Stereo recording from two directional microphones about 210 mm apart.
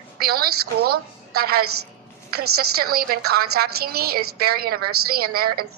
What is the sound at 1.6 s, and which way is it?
A woman's voice, 90° right.